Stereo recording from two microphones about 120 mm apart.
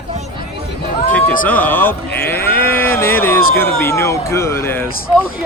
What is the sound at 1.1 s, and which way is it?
Speech, 10° left (ahead or behind).